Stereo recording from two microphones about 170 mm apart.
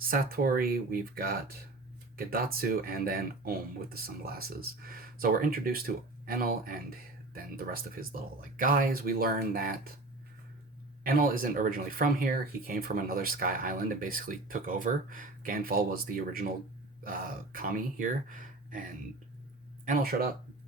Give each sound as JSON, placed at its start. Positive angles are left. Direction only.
{"t": 0.1, "sound": "speech", "side_deg": -55}
{"t": 11.0, "sound": "speech", "side_deg": -55}